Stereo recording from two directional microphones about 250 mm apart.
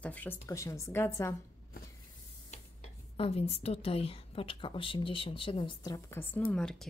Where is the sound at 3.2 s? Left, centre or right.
Left.